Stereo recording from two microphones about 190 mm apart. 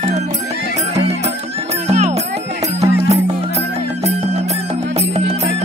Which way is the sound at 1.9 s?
35° right (ahead or behind).